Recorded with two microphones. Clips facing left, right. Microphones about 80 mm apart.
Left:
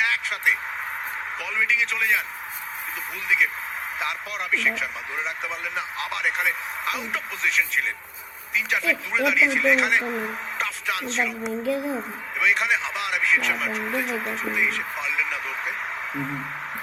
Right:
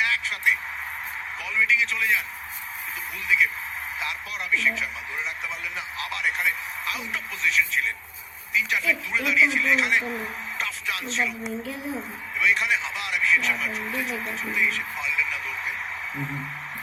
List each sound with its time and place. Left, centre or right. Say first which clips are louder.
0.0 s a sound: left 1 dB; left
1.4 s a man's voice: right 1 dB; left
3.2 s a man's voice: even; left
16.1 s music: left 3 dB; left